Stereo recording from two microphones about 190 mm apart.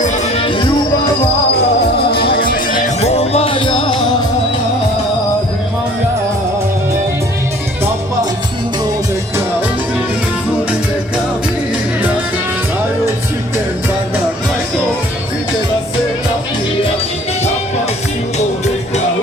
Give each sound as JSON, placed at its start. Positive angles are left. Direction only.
{"t": 0.4, "sound": "music", "side_deg": 25}
{"t": 2.0, "sound": "music", "side_deg": 30}
{"t": 2.3, "sound": "music", "side_deg": 50}